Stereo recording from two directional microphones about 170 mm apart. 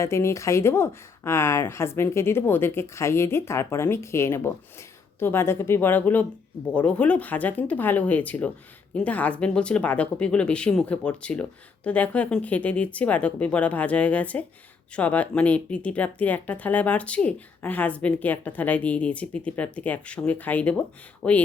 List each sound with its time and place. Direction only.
0.0 s speech: 15° left (ahead or behind)